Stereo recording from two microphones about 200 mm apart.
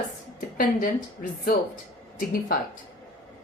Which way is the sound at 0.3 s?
45° left (ahead or behind).